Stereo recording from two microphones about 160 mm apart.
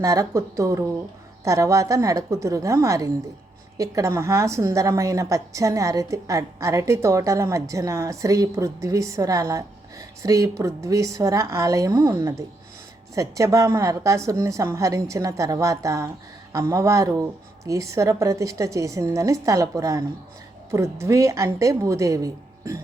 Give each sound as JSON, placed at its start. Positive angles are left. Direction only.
{"t": 0.0, "sound": "a woman's voice", "side_deg": -20}